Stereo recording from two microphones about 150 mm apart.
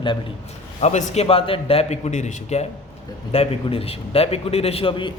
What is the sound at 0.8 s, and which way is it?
A man's voice, 45° left (ahead or behind).